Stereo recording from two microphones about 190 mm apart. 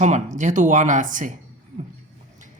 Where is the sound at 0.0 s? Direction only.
40° right (ahead or behind).